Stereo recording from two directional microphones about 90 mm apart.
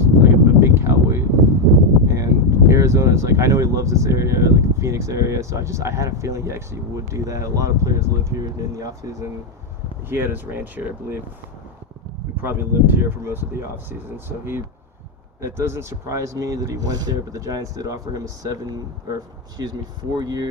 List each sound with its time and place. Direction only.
0.2 s a sound: 30° right (ahead or behind)
2.0 s speech: 35° right (ahead or behind)
10.1 s speech: 25° right (ahead or behind)
12.4 s speech: 25° right (ahead or behind); by 20.5 s 50° right (ahead or behind)